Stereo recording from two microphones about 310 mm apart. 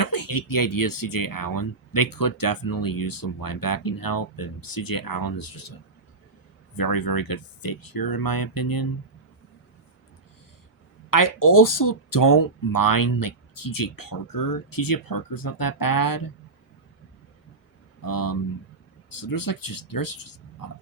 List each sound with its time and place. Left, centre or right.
0.0 s speech: left
6.7 s speech: left
11.1 s speech: left
18.0 s speech: left